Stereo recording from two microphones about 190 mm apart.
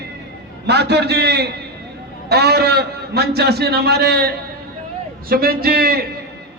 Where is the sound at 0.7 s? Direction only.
60° right (ahead or behind).